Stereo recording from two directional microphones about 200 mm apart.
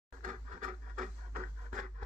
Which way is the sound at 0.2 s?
40° right (ahead or behind).